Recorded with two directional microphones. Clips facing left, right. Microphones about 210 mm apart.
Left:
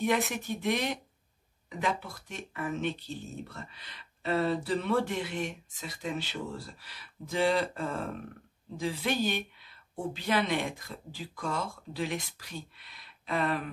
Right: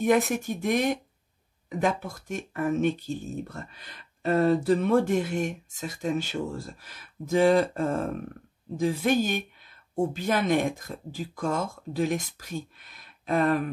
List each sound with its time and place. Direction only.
0.0 s speech: 45° right (ahead or behind)